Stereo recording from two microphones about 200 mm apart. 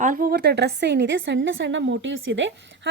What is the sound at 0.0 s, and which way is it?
A woman's voice, 45° right (ahead or behind).